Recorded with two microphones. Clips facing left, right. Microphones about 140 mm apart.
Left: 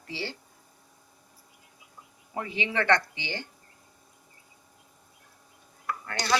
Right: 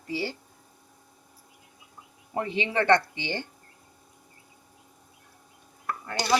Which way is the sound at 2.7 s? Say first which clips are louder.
Right 3 dB; 20° right (ahead or behind).